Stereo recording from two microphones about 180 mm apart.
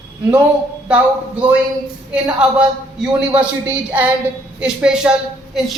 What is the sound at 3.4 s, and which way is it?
A woman's voice, 10° right (ahead or behind).